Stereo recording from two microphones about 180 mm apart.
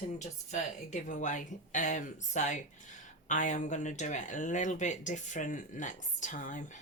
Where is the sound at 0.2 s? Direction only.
40° left (ahead or behind).